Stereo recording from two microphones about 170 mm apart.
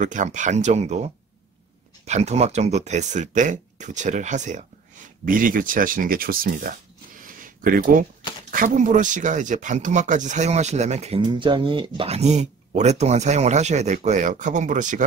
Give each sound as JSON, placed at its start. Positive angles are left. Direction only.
{"t": 0.0, "sound": "speech", "side_deg": -50}
{"t": 7.2, "sound": "a sound", "side_deg": -55}
{"t": 8.5, "sound": "speech", "side_deg": -50}
{"t": 11.2, "sound": "speech", "side_deg": -30}